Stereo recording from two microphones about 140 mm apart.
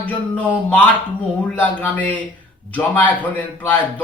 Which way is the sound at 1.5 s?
10° left (ahead or behind).